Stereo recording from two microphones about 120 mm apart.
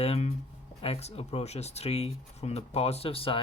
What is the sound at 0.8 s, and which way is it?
Speech, 60° left (ahead or behind).